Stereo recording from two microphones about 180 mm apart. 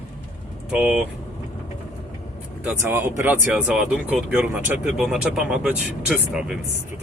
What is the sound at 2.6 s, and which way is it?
Speech, 15° right (ahead or behind).